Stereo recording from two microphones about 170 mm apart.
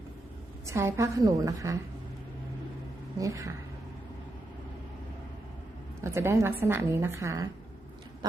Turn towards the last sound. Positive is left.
turn(degrees=-15)  # may be behind; listen again after turning